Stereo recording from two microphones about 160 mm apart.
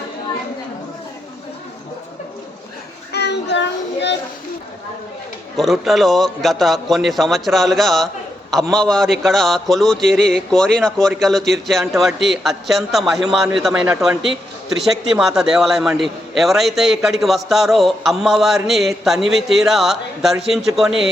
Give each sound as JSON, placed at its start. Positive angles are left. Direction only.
{"t": 3.1, "sound": "child singing", "side_deg": 90}
{"t": 5.5, "sound": "a man's voice", "side_deg": 0}
{"t": 15.1, "sound": "a man's voice", "side_deg": -5}